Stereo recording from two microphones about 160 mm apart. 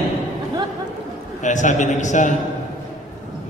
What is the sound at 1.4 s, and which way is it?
Speech, 50° left (ahead or behind).